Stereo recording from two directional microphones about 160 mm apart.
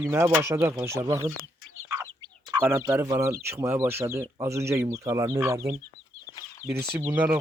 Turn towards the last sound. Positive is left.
turn(degrees=-10)  # may be behind; listen again after turning